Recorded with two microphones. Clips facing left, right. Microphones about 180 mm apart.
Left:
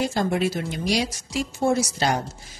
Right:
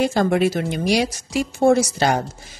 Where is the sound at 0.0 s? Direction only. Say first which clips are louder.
Right 5 dB; 65° right (ahead or behind).